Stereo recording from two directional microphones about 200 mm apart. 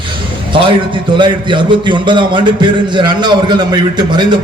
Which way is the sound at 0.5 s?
25° right (ahead or behind).